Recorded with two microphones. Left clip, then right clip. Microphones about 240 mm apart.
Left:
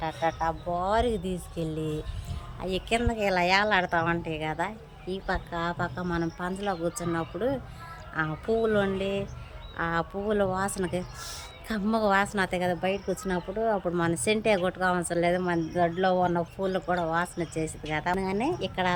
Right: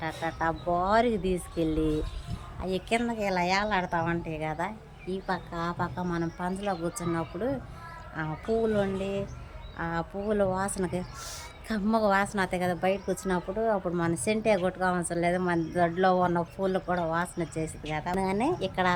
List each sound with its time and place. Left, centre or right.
0.0 s speech: left
2.6 s speech: centre